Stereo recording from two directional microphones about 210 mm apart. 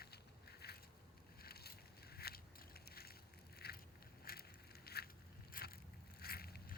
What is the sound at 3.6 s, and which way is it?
Vehicle, 50° left (ahead or behind).